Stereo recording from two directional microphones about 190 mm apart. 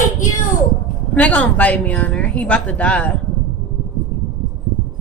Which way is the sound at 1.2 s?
10° left (ahead or behind).